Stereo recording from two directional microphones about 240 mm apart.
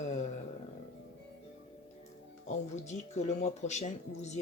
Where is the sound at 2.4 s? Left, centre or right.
Left.